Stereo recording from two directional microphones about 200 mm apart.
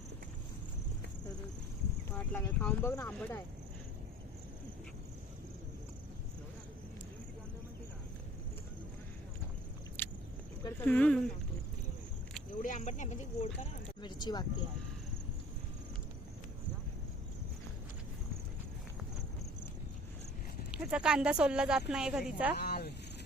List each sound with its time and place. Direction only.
2.0 s speech: 10° left (ahead or behind)
10.0 s a sound: 10° left (ahead or behind)
10.6 s speech: 10° left (ahead or behind)
12.6 s speech: 35° left (ahead or behind)
14.0 s speech: 20° left (ahead or behind)
20.7 s a woman's voice: 5° right (ahead or behind)
22.5 s speech: 55° left (ahead or behind)